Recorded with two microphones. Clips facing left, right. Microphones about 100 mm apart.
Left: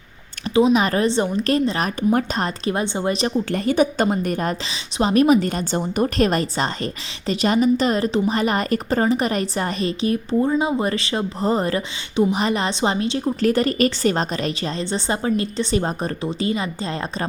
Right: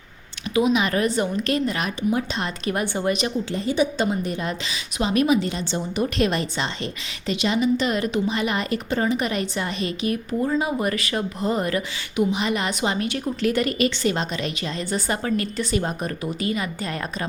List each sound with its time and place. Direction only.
0.5 s a woman's voice: 35° left (ahead or behind)
2.0 s a woman's voice: 45° left (ahead or behind)
2.6 s a woman's voice: 25° left (ahead or behind)
3.5 s a woman's voice: 60° left (ahead or behind); by 17.2 s 30° left (ahead or behind)